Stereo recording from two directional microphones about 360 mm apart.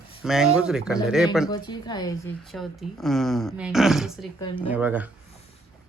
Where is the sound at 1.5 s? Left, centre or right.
Centre.